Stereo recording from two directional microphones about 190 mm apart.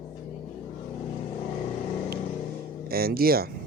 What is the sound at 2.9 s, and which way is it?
Speech, 55° right (ahead or behind).